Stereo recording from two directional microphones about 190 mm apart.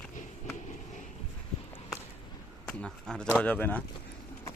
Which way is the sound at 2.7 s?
5° left (ahead or behind).